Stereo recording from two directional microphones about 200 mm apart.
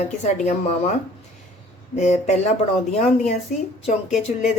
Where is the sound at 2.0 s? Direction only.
35° left (ahead or behind).